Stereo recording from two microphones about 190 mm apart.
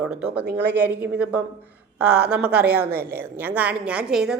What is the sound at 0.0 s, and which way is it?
Speech, 5° right (ahead or behind).